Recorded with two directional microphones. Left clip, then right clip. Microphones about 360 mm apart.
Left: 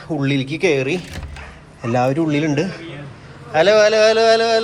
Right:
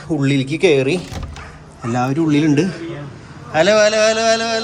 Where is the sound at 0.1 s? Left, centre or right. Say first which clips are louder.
Right 2 dB; centre.